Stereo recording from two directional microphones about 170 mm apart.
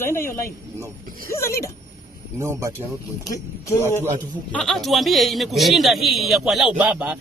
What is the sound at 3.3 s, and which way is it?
Speech, 15° left (ahead or behind).